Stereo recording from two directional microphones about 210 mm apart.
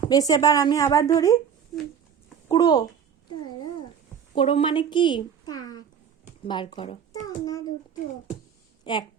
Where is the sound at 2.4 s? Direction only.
20° left (ahead or behind).